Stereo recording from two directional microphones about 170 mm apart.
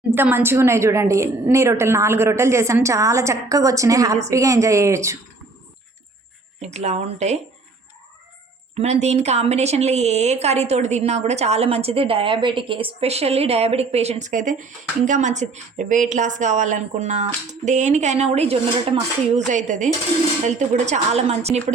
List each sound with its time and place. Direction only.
0.1 s a woman's voice: 10° right (ahead or behind)
6.6 s a woman's voice: 40° right (ahead or behind)
8.7 s a woman's voice: 40° right (ahead or behind)
19.5 s dishes: 45° right (ahead or behind)
20.5 s a woman's voice: 45° right (ahead or behind)